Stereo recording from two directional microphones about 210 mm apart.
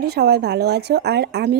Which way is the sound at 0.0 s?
50° right (ahead or behind).